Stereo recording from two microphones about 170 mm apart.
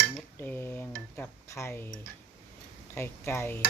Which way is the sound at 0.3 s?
10° left (ahead or behind).